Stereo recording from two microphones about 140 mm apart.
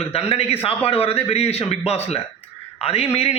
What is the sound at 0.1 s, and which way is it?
A man's voice, 45° left (ahead or behind).